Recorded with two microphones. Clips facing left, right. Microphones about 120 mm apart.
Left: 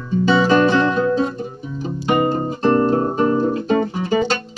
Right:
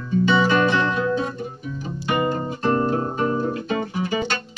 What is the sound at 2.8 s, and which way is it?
Music, 40° left (ahead or behind).